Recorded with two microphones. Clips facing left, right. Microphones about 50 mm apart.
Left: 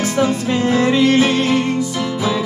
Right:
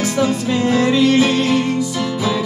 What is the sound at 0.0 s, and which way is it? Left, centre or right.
Music, left.